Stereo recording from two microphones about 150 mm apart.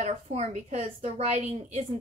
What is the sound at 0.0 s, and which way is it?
A woman's voice, 50° right (ahead or behind).